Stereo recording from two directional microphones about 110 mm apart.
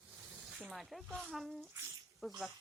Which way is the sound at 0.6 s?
Centre (ahead or behind).